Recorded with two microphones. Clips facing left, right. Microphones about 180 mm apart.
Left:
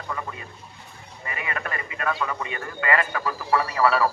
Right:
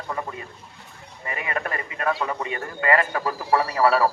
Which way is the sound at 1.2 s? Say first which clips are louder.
Right 3 dB; 40° right (ahead or behind).